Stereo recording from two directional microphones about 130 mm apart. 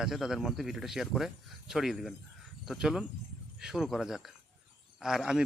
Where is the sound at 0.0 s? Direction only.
5° right (ahead or behind).